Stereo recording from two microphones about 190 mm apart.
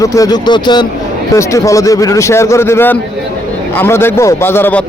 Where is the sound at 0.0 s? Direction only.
15° left (ahead or behind).